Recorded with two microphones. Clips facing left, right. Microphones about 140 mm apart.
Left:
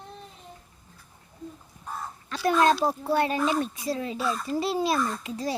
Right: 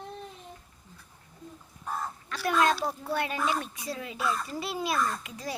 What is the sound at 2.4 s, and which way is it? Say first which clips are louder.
A child's voice: left 4 dB; 30° left (ahead or behind).